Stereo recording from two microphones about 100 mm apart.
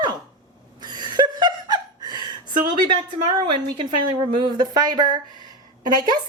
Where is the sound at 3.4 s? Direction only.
55° right (ahead or behind).